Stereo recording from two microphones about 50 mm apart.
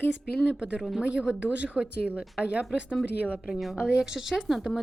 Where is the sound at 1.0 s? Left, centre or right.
Right.